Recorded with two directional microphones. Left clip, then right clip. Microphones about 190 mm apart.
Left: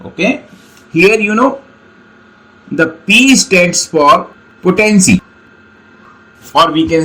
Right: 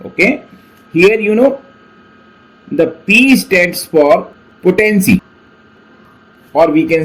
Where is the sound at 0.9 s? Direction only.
25° left (ahead or behind).